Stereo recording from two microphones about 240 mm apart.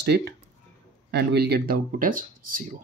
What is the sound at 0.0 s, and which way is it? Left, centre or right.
Speech, right.